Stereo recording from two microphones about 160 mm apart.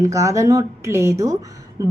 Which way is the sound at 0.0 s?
20° right (ahead or behind).